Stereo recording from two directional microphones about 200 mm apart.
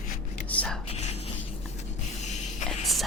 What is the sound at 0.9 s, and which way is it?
Whispering, 30° left (ahead or behind).